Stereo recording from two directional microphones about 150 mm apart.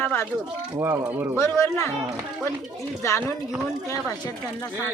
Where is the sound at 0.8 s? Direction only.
20° right (ahead or behind).